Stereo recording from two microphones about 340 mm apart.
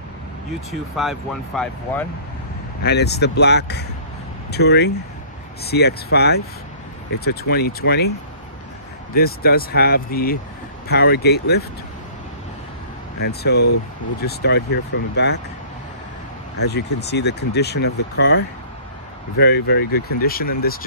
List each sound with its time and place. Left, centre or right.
0.5 s speech: centre
2.8 s speech: left
9.1 s speech: left
13.2 s speech: left
16.5 s speech: left